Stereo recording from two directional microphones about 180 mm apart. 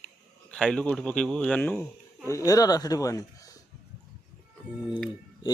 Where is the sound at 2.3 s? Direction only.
20° left (ahead or behind).